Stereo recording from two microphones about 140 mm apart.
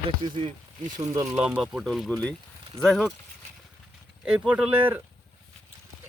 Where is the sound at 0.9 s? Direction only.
25° right (ahead or behind).